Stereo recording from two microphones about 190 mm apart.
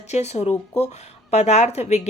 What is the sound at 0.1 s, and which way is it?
Speech, 35° left (ahead or behind).